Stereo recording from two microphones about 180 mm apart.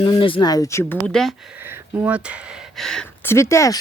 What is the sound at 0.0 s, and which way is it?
Speech, 25° left (ahead or behind).